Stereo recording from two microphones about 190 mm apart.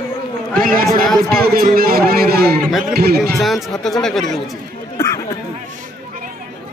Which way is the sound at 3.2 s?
Centre (ahead or behind).